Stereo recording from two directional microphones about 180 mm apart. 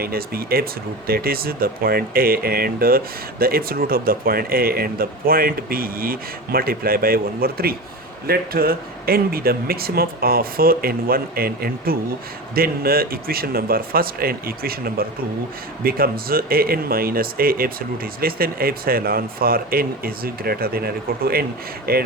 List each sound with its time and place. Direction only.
0.0 s speech: 55° right (ahead or behind)